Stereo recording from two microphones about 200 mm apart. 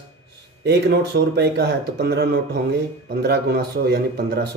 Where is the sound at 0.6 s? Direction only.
55° right (ahead or behind).